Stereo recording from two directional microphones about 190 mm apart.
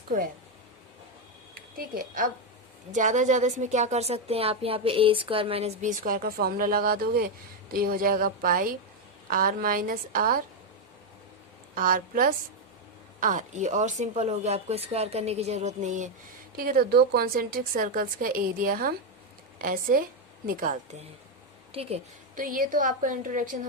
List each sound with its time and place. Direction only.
1.7 s a woman's voice: 45° right (ahead or behind)
11.7 s a woman's voice: 45° right (ahead or behind)
16.6 s a woman's voice: 50° right (ahead or behind)
21.7 s a woman's voice: 30° right (ahead or behind)
22.4 s a woman's voice: 45° right (ahead or behind)